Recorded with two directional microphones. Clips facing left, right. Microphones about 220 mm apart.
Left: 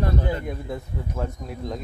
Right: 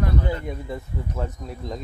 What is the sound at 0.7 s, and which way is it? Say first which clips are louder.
Speech: even; centre (ahead or behind).